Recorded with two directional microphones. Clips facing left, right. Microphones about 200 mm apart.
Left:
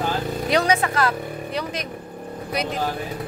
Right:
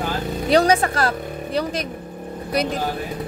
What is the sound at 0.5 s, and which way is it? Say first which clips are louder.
Speech: right 4 dB; 35° right (ahead or behind).